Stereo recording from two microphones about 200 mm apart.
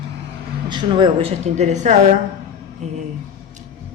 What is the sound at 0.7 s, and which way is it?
A woman's voice, 20° right (ahead or behind).